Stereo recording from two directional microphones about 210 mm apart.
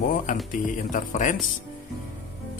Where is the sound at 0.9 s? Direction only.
35° left (ahead or behind).